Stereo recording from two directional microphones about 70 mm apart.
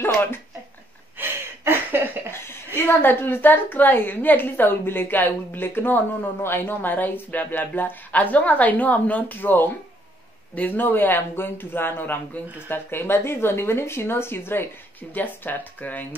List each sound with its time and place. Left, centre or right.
0.0 s a sound: left
1.1 s gasp: right
2.3 s a woman's voice: left